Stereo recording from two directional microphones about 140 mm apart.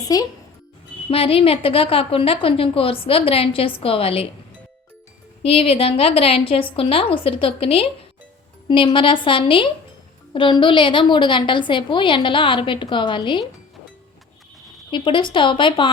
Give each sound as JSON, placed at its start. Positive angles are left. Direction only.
{"t": 0.0, "sound": "speech", "side_deg": 25}
{"t": 1.1, "sound": "a woman's voice", "side_deg": 45}
{"t": 5.4, "sound": "a woman's voice", "side_deg": 40}
{"t": 14.8, "sound": "a woman's voice", "side_deg": 35}